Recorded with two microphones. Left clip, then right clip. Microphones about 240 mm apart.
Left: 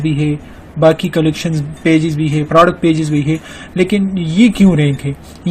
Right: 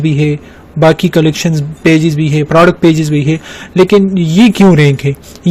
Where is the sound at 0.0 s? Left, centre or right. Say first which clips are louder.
Right 4 dB; right.